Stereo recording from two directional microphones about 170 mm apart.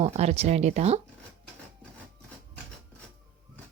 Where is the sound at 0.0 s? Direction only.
40° right (ahead or behind).